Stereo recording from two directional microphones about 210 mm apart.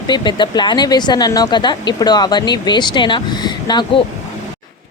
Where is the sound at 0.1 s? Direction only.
20° left (ahead or behind).